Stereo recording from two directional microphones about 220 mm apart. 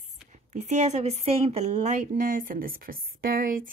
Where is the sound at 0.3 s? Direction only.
30° right (ahead or behind).